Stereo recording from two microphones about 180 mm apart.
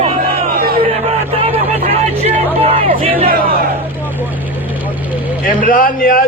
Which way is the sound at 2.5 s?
35° right (ahead or behind).